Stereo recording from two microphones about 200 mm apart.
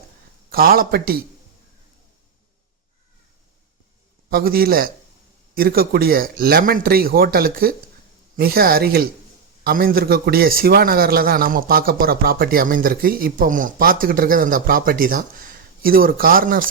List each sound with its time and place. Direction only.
0.5 s speech: 50° right (ahead or behind)
4.3 s speech: 45° right (ahead or behind)